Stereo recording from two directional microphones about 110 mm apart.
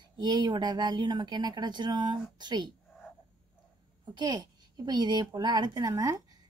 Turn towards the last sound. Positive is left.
turn(degrees=-35)  # may be behind; listen again after turning